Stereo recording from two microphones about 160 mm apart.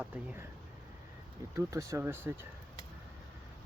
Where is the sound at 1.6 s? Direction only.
20° right (ahead or behind).